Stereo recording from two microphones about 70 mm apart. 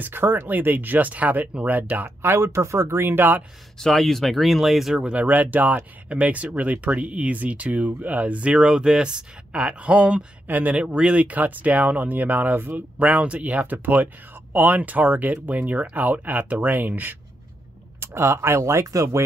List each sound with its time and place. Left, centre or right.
0.0 s speech: right
2.0 s speech: right
3.8 s speech: centre
5.1 s speech: right
18.0 s speech: right